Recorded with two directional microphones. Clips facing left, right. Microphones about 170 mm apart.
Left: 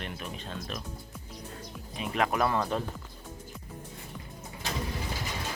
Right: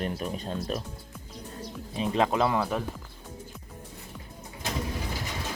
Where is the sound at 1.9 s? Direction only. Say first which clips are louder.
Right 4 dB; 30° right (ahead or behind).